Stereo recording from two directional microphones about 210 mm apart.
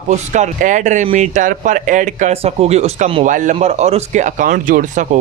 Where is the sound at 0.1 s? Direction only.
35° right (ahead or behind).